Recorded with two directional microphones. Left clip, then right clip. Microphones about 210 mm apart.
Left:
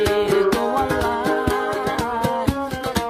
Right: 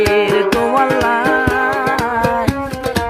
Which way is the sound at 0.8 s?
20° right (ahead or behind).